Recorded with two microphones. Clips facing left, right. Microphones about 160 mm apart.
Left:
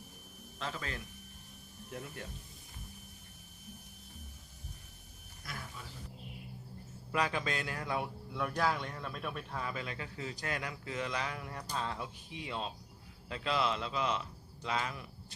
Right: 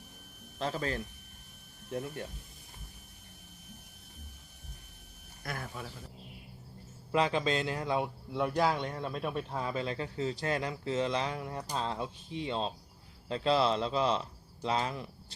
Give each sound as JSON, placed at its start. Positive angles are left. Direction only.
{"t": 0.6, "sound": "a man's voice", "side_deg": -35}
{"t": 5.4, "sound": "speech", "side_deg": -55}
{"t": 7.1, "sound": "a man's voice", "side_deg": -25}